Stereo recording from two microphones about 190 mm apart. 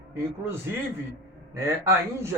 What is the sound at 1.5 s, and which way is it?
Speech, 15° right (ahead or behind).